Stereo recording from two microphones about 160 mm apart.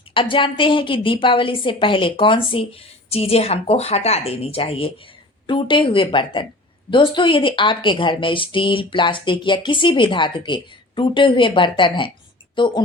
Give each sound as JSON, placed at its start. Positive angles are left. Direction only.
{"t": 0.1, "sound": "a woman's voice", "side_deg": 30}